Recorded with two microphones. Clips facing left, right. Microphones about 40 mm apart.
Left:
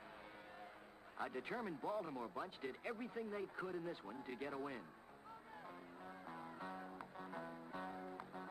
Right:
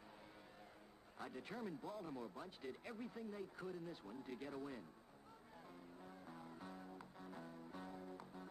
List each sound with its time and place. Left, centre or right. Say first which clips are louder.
1.1 s a man's voice: left 6 dB; left
6.0 s music: left 5 dB; left